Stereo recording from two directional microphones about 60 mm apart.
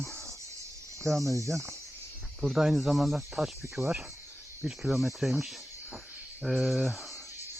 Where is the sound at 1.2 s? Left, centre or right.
Right.